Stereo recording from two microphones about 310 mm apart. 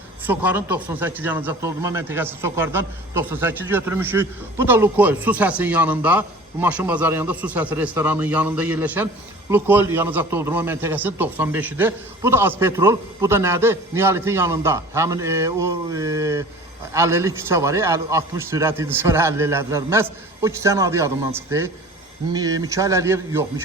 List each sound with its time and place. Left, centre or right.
0.3 s a man's voice: centre